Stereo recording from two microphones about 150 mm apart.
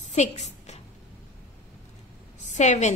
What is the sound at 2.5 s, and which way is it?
Speech, 50° left (ahead or behind).